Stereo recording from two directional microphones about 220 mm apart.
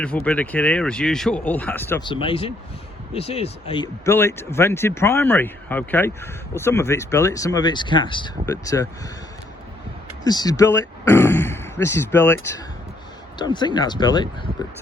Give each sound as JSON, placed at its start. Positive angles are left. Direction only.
{"t": 0.3, "sound": "speech", "side_deg": 5}
{"t": 2.0, "sound": "speech", "side_deg": 25}
{"t": 10.2, "sound": "speech", "side_deg": 15}